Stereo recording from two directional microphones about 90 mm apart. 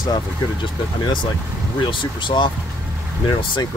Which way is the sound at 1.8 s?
65° left (ahead or behind).